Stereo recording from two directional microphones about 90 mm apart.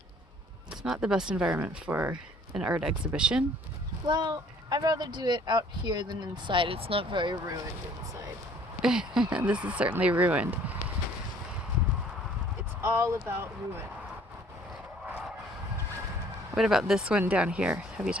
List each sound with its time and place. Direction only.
0.9 s speech: 10° right (ahead or behind)
1.6 s speech: 20° right (ahead or behind)
4.0 s speech: 55° right (ahead or behind)
7.3 s speech: 40° right (ahead or behind)
8.8 s speech: 5° right (ahead or behind)
12.8 s speech: 30° right (ahead or behind)
16.6 s speech: 5° right (ahead or behind)